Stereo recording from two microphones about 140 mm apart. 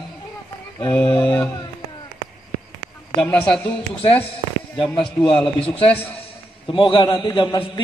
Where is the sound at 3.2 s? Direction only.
5° left (ahead or behind).